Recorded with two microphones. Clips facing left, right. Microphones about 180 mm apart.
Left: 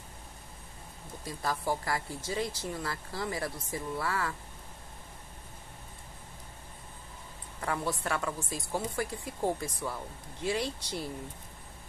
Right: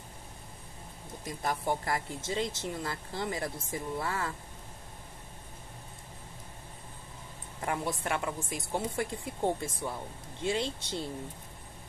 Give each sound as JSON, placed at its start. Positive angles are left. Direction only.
{"t": 1.2, "sound": "speech", "side_deg": -20}
{"t": 7.6, "sound": "speech", "side_deg": -20}